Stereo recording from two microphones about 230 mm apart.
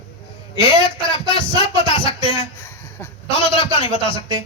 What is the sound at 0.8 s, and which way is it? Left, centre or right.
Speech, left.